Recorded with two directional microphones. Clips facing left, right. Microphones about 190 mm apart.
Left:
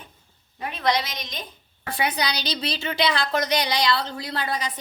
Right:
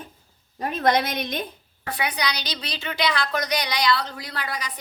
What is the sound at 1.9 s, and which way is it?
A woman's voice, 30° left (ahead or behind).